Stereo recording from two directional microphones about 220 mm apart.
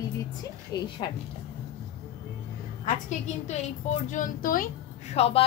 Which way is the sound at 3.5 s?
35° left (ahead or behind).